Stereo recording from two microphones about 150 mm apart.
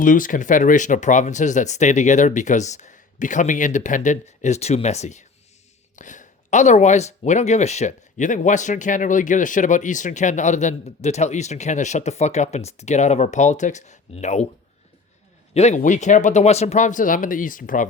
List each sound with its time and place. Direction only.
0.0 s speech: 60° left (ahead or behind)
15.5 s speech: 50° left (ahead or behind)